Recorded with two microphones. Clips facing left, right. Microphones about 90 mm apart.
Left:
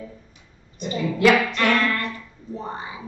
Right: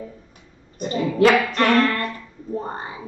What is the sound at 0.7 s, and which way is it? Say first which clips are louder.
Speech: right 5 dB; 40° right (ahead or behind).